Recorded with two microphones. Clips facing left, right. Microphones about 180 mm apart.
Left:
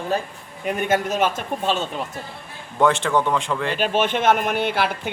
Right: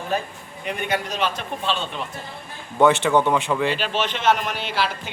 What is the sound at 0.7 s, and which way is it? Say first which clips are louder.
Speech: left 5 dB; 45° left (ahead or behind).